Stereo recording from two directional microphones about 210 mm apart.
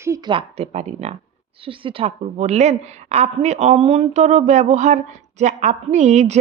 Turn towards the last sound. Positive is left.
turn(degrees=-35)  # may be behind; listen again after turning